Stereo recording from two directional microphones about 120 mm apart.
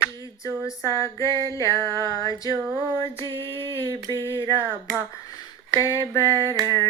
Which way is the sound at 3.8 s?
40° right (ahead or behind).